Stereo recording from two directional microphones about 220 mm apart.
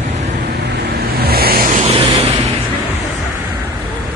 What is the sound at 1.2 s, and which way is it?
Vehicle, 45° right (ahead or behind).